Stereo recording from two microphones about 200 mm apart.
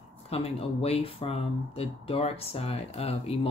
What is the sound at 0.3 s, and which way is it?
Speech, 30° left (ahead or behind).